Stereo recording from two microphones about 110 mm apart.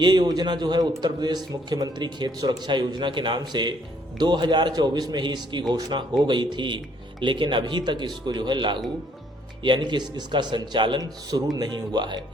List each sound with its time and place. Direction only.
0.0 s a man's voice: 40° right (ahead or behind)